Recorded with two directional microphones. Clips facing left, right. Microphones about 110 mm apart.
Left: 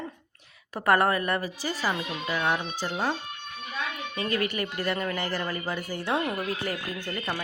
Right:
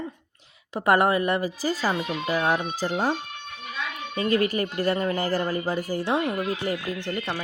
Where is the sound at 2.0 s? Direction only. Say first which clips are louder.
Right 4 dB; 40° right (ahead or behind).